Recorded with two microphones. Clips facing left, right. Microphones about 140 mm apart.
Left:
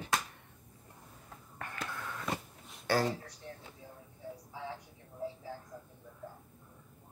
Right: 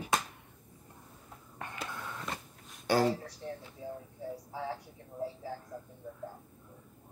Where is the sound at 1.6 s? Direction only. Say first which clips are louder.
Right 1 dB; 20° right (ahead or behind).